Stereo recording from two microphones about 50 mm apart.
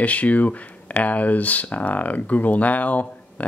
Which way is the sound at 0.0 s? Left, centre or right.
Left.